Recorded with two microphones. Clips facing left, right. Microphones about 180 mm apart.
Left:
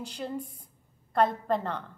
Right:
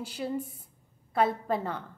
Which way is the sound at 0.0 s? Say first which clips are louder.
Right 2 dB; 5° right (ahead or behind).